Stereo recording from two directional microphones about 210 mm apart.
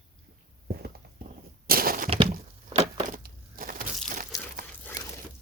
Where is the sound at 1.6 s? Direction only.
45° right (ahead or behind).